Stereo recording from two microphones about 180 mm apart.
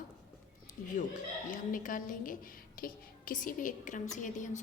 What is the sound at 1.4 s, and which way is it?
A woman's voice, 50° left (ahead or behind).